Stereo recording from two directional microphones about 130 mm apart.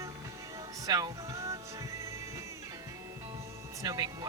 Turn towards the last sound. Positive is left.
turn(degrees=-30)  # may be behind; listen again after turning